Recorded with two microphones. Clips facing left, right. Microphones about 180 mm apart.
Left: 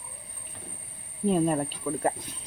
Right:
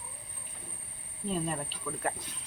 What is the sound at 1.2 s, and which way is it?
Speech, 55° left (ahead or behind).